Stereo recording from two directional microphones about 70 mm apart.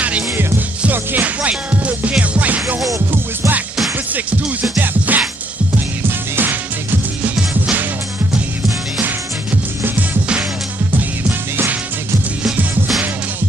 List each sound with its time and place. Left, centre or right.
0.8 s music: right
4.7 s music: right
11.0 s music: right